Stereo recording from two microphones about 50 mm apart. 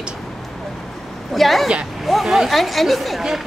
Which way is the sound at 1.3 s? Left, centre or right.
Centre.